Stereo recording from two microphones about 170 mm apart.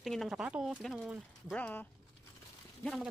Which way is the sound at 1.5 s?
10° left (ahead or behind).